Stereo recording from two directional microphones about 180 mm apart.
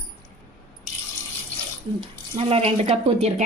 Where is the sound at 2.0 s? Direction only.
35° right (ahead or behind).